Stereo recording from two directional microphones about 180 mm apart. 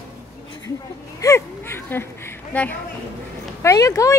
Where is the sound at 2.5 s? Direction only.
10° left (ahead or behind).